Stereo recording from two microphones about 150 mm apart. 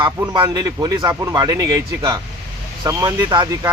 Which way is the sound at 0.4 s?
30° right (ahead or behind).